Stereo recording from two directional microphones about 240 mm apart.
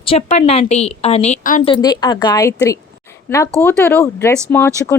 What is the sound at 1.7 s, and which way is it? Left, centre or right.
Speech, centre.